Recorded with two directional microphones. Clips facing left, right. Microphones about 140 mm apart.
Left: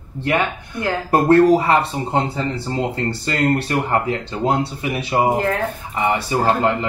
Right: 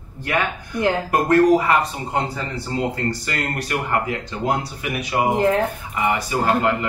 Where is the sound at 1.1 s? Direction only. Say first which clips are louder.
Left 4 dB; 30° left (ahead or behind).